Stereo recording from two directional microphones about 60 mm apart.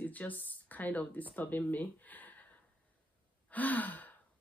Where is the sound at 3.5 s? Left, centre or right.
Left.